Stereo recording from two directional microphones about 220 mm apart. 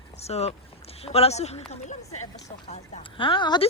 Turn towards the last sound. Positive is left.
turn(degrees=20)  # may be behind; listen again after turning